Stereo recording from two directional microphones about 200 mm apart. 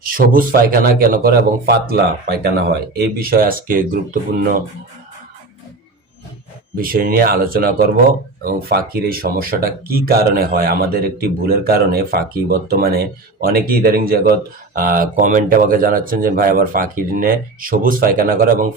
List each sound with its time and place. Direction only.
0.0 s speech: 45° right (ahead or behind)
6.7 s speech: 45° right (ahead or behind)